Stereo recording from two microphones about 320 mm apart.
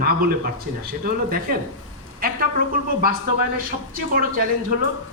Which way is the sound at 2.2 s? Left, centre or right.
Right.